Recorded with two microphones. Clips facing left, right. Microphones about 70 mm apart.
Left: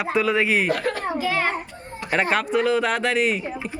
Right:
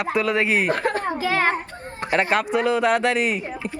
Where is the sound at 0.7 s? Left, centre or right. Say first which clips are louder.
Right 1 dB; right.